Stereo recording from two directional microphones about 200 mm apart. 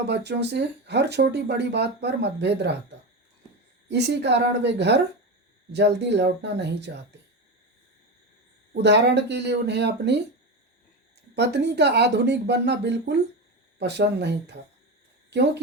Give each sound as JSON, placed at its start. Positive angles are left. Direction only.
{"t": 0.1, "sound": "speech", "side_deg": -55}
{"t": 3.8, "sound": "speech", "side_deg": -60}
{"t": 8.7, "sound": "speech", "side_deg": -60}
{"t": 11.3, "sound": "speech", "side_deg": -55}